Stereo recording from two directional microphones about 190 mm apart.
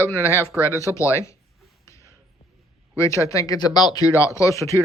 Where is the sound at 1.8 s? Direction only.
15° left (ahead or behind).